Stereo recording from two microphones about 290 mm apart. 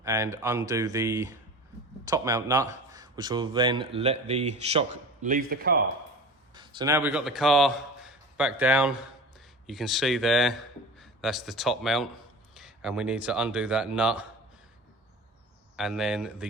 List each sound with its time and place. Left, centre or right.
0.0 s speech: centre; by 5.7 s right
6.5 s a man's voice: centre
15.7 s a man's voice: centre